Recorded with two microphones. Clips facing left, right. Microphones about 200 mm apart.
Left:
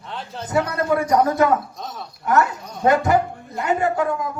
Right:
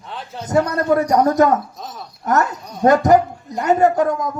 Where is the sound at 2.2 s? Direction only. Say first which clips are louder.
Even; 40° right (ahead or behind).